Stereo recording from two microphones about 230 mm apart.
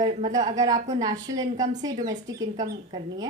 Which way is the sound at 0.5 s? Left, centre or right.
Centre.